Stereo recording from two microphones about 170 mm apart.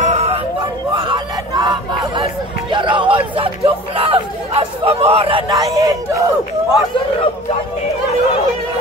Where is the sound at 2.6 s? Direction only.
30° right (ahead or behind).